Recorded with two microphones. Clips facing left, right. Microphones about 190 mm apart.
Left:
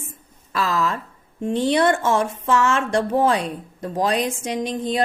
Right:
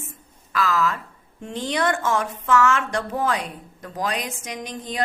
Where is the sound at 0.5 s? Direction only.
30° left (ahead or behind).